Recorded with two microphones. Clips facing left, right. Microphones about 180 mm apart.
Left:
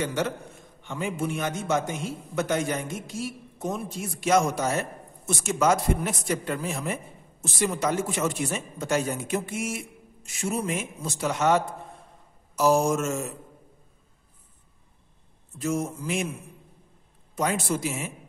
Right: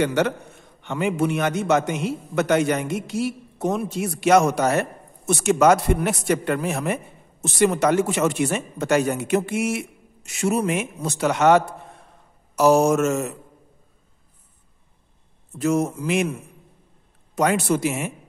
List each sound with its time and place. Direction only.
0.0 s a man's voice: 70° right (ahead or behind)
15.5 s a man's voice: 70° right (ahead or behind)
17.4 s a man's voice: 70° right (ahead or behind)